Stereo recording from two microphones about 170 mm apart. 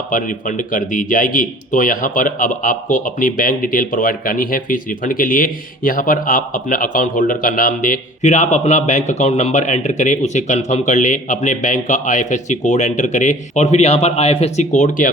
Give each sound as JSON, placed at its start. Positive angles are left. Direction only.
{"t": 0.1, "sound": "a man's voice", "side_deg": 50}